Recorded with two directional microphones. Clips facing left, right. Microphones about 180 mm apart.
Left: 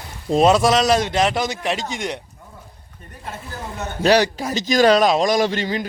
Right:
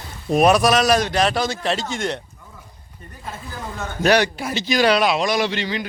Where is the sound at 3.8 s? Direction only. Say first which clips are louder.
Left 1 dB; 20° left (ahead or behind).